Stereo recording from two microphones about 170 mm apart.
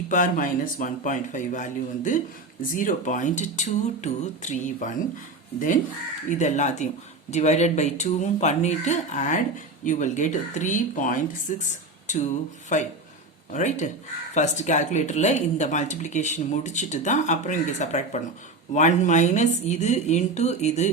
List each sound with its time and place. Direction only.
0.1 s a woman's voice: 50° left (ahead or behind)